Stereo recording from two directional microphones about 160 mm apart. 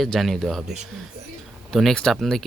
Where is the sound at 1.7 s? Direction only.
5° left (ahead or behind).